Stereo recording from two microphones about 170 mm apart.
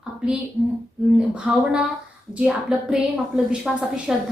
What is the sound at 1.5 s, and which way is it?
A woman's voice, centre (ahead or behind).